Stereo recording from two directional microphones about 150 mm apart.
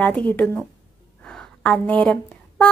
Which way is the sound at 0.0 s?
5° left (ahead or behind).